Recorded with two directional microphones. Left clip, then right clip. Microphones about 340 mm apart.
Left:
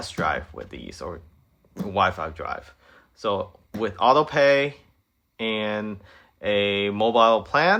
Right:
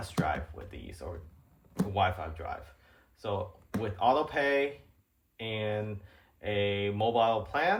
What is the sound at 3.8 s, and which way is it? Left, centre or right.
Speech, left.